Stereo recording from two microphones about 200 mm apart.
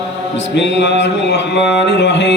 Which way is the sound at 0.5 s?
60° left (ahead or behind).